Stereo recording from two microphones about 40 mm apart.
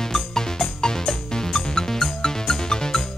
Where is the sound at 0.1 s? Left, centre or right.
Centre.